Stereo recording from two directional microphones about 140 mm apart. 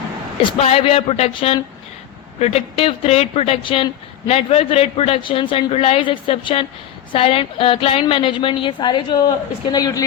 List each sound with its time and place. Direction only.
0.6 s a woman's voice: 45° left (ahead or behind); by 10.0 s 30° left (ahead or behind)